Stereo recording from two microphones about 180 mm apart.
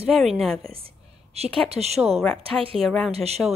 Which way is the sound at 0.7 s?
30° right (ahead or behind).